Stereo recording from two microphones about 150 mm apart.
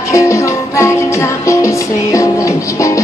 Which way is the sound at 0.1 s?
20° left (ahead or behind).